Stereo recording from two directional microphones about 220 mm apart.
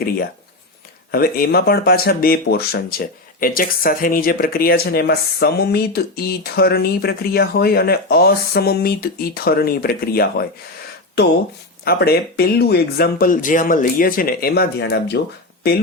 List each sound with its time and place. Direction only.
1.1 s speech: 45° left (ahead or behind)
11.9 s speech: 45° left (ahead or behind)